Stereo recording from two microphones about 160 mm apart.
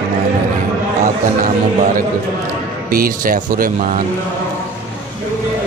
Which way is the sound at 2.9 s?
65° right (ahead or behind).